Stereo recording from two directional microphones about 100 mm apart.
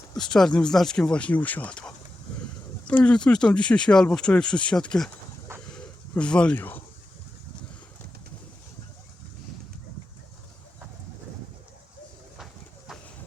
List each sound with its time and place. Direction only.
0.2 s speech: 5° left (ahead or behind)
5.7 s a sound: 10° left (ahead or behind)
6.6 s speech: 20° left (ahead or behind)
12.9 s horse: 5° right (ahead or behind)